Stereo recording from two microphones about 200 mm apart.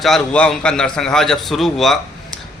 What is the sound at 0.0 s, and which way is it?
A man's voice, 5° left (ahead or behind).